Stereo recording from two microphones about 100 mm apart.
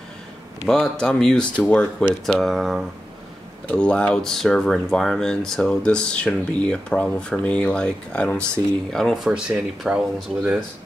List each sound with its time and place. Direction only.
0.7 s speech: 10° left (ahead or behind)
3.6 s speech: 10° left (ahead or behind)
8.9 s speech: centre (ahead or behind)